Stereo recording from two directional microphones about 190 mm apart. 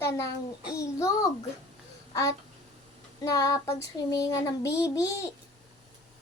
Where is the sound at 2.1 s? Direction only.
15° left (ahead or behind).